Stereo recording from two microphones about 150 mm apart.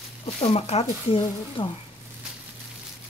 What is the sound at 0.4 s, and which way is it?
Speech, 40° left (ahead or behind).